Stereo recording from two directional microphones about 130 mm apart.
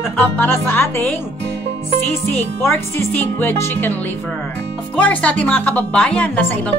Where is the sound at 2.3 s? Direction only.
20° left (ahead or behind).